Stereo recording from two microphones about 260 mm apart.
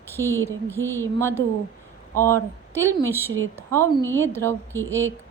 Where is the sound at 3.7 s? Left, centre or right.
Centre.